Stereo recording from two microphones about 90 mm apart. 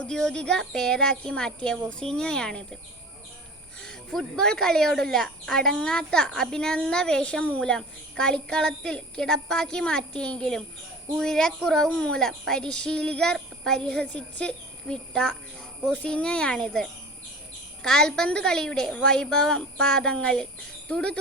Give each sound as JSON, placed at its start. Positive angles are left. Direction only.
{"t": 0.0, "sound": "speech", "side_deg": 10}
{"t": 3.8, "sound": "speech", "side_deg": 5}